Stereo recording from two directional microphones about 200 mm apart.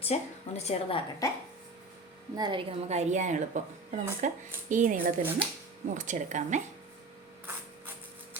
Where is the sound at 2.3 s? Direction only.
20° right (ahead or behind).